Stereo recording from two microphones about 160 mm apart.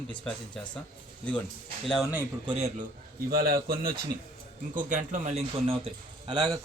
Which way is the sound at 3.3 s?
70° right (ahead or behind).